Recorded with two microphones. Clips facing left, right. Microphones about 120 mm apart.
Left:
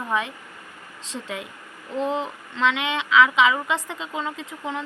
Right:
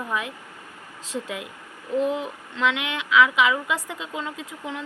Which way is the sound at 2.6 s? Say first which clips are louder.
Left 2 dB; 10° right (ahead or behind).